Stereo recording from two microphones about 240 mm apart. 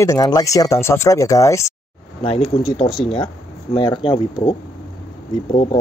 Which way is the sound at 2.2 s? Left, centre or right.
Left.